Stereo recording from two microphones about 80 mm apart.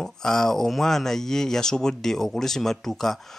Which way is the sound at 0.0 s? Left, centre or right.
Centre.